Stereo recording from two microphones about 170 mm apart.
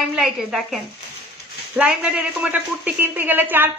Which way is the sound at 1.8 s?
5° right (ahead or behind).